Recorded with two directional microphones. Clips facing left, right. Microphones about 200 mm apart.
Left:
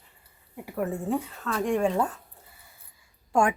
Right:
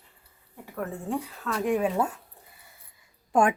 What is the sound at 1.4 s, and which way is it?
Speech, 5° right (ahead or behind).